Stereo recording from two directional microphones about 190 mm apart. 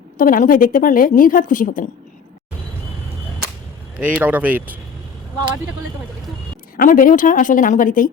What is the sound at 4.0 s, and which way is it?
Speech, 5° right (ahead or behind).